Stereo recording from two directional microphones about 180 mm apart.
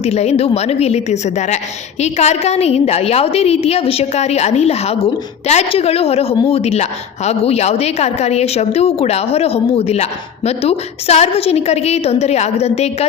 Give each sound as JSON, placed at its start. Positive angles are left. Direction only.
{"t": 0.0, "sound": "a woman's voice", "side_deg": 35}